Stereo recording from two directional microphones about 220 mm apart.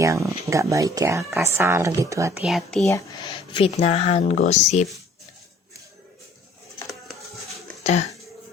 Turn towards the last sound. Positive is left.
turn(degrees=0)  # may be behind; listen again after turning